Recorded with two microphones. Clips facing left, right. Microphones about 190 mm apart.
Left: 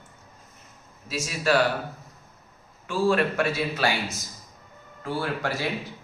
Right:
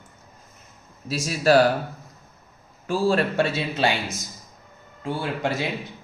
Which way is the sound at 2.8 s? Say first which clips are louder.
Right 1 dB; 30° right (ahead or behind).